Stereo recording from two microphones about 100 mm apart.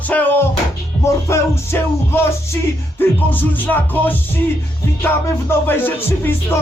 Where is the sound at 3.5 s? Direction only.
20° left (ahead or behind).